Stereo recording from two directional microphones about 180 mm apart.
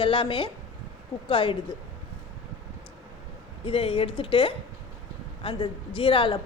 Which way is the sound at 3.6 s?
30° left (ahead or behind).